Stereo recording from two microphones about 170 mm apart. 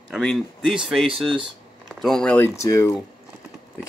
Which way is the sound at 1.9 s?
Centre (ahead or behind).